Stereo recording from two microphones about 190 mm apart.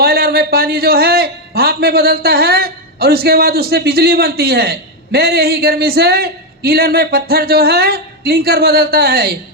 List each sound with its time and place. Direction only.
0.0 s a man's voice: 50° right (ahead or behind)